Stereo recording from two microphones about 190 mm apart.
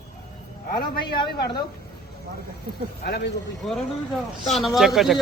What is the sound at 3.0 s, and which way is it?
Speech, 55° left (ahead or behind).